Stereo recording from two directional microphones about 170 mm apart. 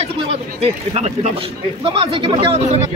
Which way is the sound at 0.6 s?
40° right (ahead or behind).